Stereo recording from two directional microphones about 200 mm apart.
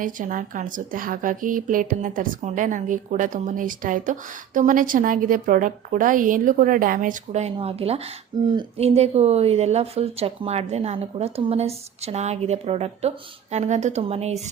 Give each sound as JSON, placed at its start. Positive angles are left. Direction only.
{"t": 0.0, "sound": "speech", "side_deg": -40}